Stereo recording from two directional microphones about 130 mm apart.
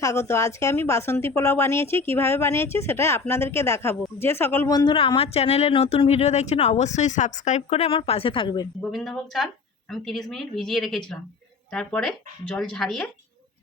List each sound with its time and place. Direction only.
0.0 s speech: 25° left (ahead or behind)
4.9 s a woman's voice: 45° left (ahead or behind)
8.9 s speech: centre (ahead or behind)